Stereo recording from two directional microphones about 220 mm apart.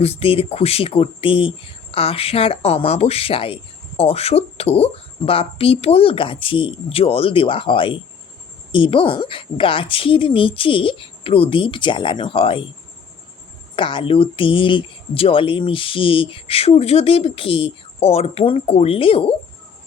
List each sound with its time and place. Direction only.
0.0 s speech: 25° left (ahead or behind)
13.7 s speech: 20° left (ahead or behind)